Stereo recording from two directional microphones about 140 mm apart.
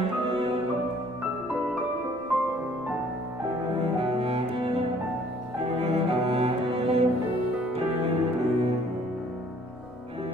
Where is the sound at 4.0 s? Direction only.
45° right (ahead or behind).